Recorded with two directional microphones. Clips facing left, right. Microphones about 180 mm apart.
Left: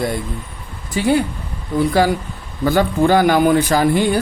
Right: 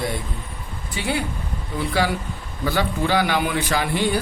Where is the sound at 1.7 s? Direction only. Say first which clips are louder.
Left 7 dB; 45° left (ahead or behind).